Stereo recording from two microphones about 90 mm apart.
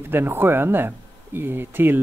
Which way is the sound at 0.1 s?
25° right (ahead or behind).